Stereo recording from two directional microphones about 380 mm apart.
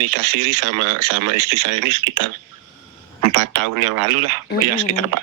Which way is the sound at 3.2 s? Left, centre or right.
Right.